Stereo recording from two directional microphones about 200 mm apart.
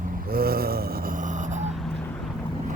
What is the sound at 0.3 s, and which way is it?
Gasp, 50° right (ahead or behind).